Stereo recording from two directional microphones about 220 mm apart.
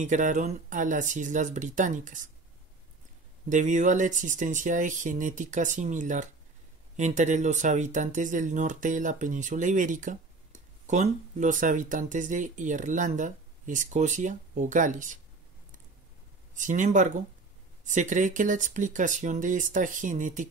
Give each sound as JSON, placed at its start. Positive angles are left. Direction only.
{"t": 0.0, "sound": "speech", "side_deg": -35}
{"t": 3.4, "sound": "speech", "side_deg": -35}
{"t": 16.5, "sound": "speech", "side_deg": -35}